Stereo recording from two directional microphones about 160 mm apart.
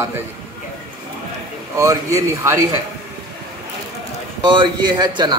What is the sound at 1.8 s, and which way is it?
Speech, 20° right (ahead or behind).